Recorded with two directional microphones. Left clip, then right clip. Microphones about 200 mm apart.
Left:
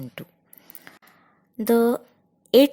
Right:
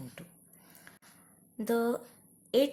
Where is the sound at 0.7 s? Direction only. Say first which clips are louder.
Left 8 dB; 40° left (ahead or behind).